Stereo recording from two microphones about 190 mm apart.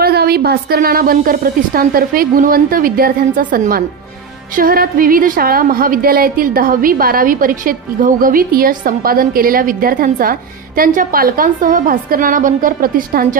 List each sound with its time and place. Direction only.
0.0 s a woman's voice: 55° right (ahead or behind)